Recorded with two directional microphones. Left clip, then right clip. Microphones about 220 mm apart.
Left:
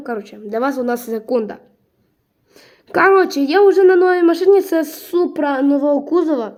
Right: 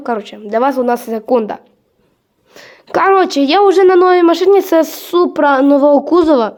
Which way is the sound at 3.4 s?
5° right (ahead or behind).